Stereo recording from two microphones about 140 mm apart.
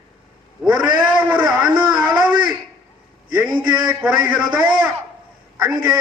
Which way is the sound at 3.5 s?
30° right (ahead or behind).